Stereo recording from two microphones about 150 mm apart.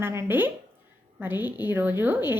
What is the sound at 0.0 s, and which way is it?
A woman's voice, 15° right (ahead or behind).